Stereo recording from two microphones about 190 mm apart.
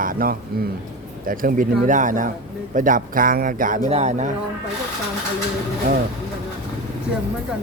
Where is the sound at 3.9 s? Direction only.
35° right (ahead or behind).